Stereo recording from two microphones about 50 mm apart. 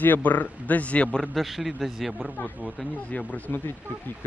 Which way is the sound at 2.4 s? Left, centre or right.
Left.